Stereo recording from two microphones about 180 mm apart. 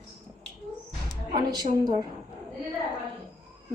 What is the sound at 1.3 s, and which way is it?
Music, 20° right (ahead or behind).